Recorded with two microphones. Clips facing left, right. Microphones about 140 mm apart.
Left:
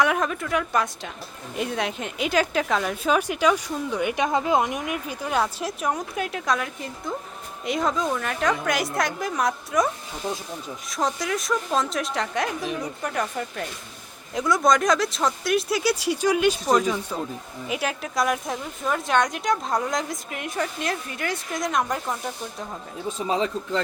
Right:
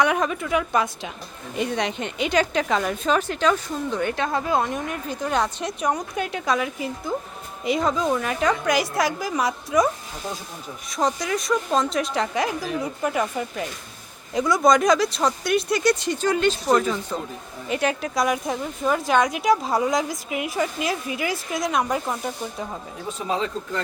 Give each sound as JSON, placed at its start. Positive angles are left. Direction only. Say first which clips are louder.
{"t": 0.0, "sound": "a woman's voice", "louder": "right 1 dB", "side_deg": 0}